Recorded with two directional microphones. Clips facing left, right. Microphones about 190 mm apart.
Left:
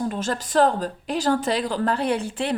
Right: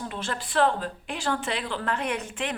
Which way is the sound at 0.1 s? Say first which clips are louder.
Left 6 dB; 40° left (ahead or behind).